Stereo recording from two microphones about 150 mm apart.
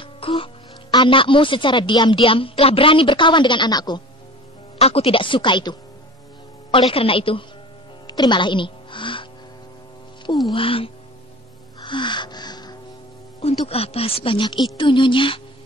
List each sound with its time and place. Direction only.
0.0 s music: 35° left (ahead or behind)
0.9 s speech: 35° left (ahead or behind)
4.7 s speech: 40° left (ahead or behind)
8.1 s music: 30° left (ahead or behind)
10.4 s speech: 35° left (ahead or behind)
11.8 s music: 30° left (ahead or behind)
13.4 s speech: 40° left (ahead or behind)